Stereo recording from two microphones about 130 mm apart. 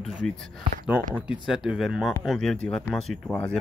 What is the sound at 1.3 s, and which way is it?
Speech, 5° right (ahead or behind).